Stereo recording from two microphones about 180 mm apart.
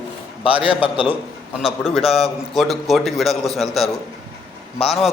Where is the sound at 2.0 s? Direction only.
Centre (ahead or behind).